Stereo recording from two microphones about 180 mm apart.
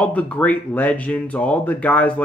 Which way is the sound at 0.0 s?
5° left (ahead or behind).